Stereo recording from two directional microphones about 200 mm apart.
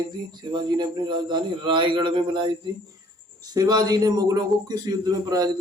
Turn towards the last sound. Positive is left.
turn(degrees=-20)  # may be behind; listen again after turning